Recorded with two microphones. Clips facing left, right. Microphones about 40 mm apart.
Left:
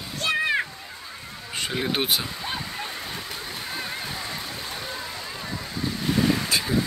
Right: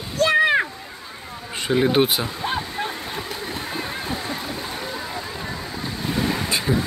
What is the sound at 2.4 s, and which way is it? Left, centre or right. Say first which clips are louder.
Waterfall: right 6 dB; right.